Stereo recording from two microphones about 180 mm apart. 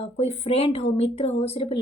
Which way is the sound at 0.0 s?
35° left (ahead or behind).